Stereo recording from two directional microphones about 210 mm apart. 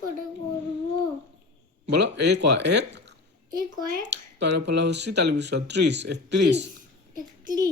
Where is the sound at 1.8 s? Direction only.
55° right (ahead or behind).